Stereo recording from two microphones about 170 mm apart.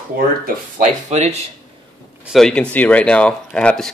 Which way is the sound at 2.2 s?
Centre (ahead or behind).